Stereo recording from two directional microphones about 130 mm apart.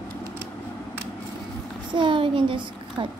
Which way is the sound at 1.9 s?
40° right (ahead or behind).